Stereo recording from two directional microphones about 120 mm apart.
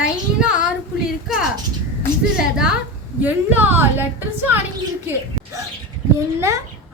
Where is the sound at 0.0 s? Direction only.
5° right (ahead or behind).